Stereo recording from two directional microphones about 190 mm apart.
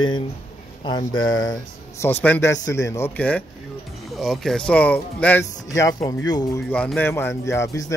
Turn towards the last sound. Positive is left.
turn(degrees=15)  # may be behind; listen again after turning